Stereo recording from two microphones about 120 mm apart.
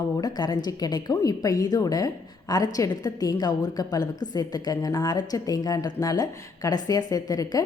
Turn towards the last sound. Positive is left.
turn(degrees=30)  # may be behind; listen again after turning